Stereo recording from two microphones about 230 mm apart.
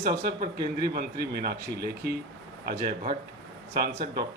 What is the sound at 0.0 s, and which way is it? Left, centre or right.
A man's voice, right.